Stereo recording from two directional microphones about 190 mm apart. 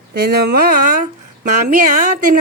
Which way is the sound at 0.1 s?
55° right (ahead or behind).